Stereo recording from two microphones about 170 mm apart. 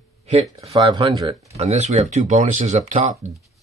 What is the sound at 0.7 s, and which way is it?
Speech, 25° right (ahead or behind).